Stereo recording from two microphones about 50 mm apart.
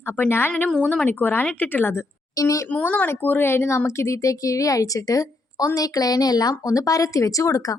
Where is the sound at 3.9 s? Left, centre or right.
Left.